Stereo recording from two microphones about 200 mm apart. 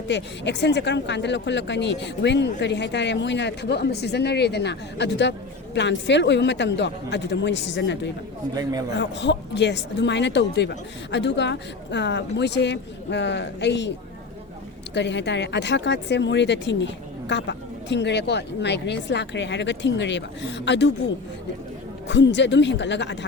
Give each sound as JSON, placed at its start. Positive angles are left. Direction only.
{"t": 0.1, "sound": "speech", "side_deg": 60}
{"t": 14.9, "sound": "speech", "side_deg": 60}
{"t": 22.1, "sound": "speech", "side_deg": 60}